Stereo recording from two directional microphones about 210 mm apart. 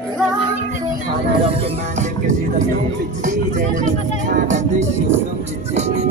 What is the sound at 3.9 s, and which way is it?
Music, 35° right (ahead or behind).